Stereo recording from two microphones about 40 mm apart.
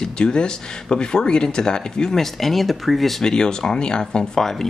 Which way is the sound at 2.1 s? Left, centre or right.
Centre.